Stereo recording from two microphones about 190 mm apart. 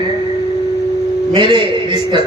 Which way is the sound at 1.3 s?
25° right (ahead or behind).